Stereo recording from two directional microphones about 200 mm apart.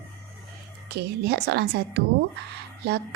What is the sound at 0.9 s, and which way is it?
A woman's voice, 55° right (ahead or behind).